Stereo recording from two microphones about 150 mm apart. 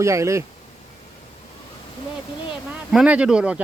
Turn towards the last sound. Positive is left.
turn(degrees=-5)  # may be behind; listen again after turning